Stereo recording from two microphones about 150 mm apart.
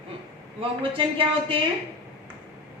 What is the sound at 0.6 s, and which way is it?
Speech, 35° right (ahead or behind).